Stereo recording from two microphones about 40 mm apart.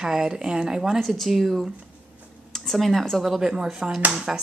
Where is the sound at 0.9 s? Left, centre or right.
Centre.